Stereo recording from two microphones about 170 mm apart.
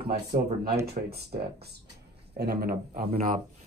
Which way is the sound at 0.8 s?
70° right (ahead or behind).